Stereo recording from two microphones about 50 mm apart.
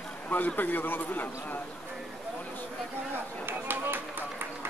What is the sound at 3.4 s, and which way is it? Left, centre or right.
Chop, right.